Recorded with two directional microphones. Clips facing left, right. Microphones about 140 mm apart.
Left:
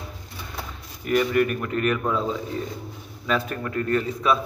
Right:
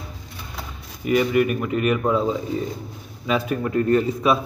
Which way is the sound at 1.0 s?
5° right (ahead or behind).